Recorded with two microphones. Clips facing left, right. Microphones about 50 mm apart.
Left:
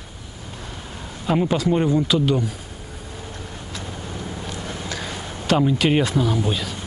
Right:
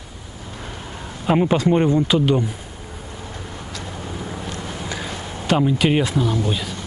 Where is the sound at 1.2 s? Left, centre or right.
Right.